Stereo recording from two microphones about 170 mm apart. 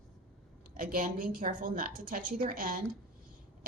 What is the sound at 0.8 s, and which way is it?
A woman's voice, 55° right (ahead or behind).